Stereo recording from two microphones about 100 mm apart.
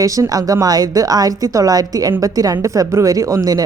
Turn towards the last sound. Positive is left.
turn(degrees=-35)  # may be behind; listen again after turning